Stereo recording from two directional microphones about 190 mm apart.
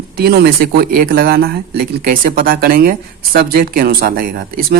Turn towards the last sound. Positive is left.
turn(degrees=-50)  # may be behind; listen again after turning